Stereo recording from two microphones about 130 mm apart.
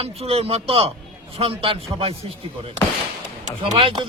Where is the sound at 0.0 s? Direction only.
50° right (ahead or behind).